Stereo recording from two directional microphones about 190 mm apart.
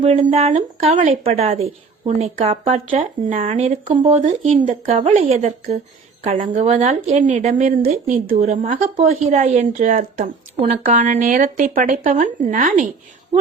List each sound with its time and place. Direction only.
0.2 s a woman's voice: 35° right (ahead or behind)
9.1 s a woman's voice: 35° right (ahead or behind)